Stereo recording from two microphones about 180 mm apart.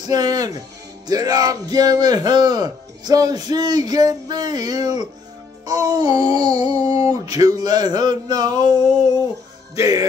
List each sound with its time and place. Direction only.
0.0 s speech: 20° right (ahead or behind)
9.8 s speech: 20° right (ahead or behind)